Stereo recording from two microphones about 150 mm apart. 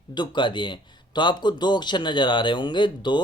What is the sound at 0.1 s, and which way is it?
Speech, 30° left (ahead or behind).